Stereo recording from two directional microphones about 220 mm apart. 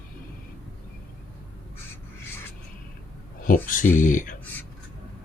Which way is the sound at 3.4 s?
40° left (ahead or behind).